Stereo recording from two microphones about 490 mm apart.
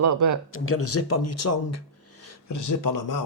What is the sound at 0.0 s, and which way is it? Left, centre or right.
Speech, right.